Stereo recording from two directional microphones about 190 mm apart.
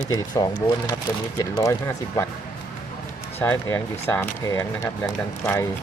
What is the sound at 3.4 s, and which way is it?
Speech, 10° left (ahead or behind).